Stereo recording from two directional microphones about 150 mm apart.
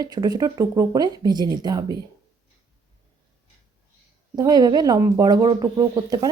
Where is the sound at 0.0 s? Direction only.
25° right (ahead or behind).